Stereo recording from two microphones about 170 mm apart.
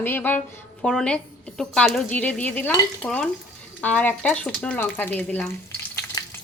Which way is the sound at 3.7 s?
10° left (ahead or behind).